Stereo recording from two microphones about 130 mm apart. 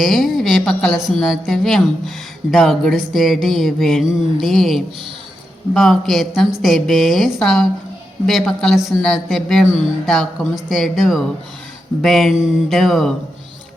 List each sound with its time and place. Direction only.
0.0 s speech: centre (ahead or behind)